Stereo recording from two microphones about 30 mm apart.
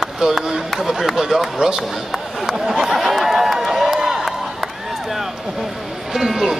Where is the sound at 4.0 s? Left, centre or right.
Centre.